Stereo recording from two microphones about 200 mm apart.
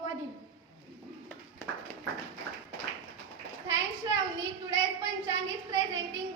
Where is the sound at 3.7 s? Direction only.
15° right (ahead or behind).